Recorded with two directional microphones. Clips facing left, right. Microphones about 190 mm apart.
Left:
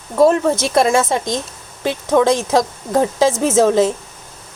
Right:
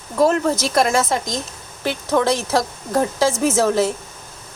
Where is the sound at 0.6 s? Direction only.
25° left (ahead or behind).